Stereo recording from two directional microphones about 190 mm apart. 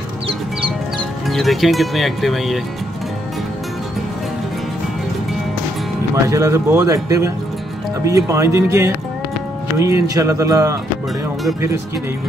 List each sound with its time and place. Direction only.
1.2 s speech: centre (ahead or behind)
6.2 s speech: 15° right (ahead or behind)